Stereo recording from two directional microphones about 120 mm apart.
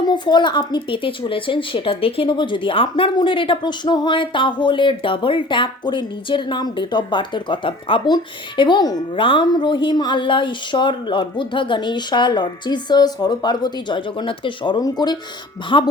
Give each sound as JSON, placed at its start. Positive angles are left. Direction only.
{"t": 0.0, "sound": "speech", "side_deg": 40}